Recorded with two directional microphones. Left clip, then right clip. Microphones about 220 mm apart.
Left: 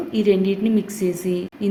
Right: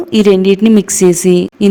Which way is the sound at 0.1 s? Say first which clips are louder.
Right 11 dB; 50° right (ahead or behind).